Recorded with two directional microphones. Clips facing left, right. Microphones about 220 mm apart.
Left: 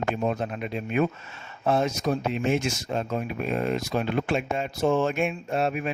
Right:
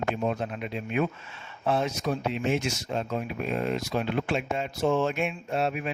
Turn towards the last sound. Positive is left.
turn(degrees=50)  # may be behind; listen again after turning